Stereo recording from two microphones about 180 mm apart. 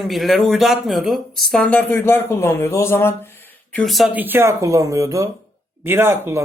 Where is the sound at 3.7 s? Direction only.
Centre (ahead or behind).